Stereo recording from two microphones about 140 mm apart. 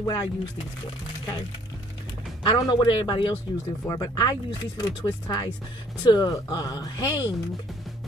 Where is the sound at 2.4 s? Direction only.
30° left (ahead or behind).